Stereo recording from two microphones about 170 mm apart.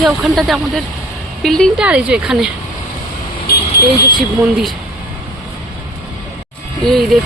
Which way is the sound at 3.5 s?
70° left (ahead or behind).